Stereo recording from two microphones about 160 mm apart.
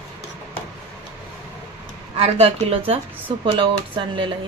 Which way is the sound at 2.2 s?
40° right (ahead or behind).